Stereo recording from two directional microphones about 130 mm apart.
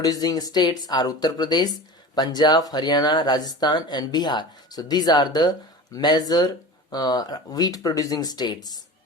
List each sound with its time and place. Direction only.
0.0 s speech: 30° left (ahead or behind)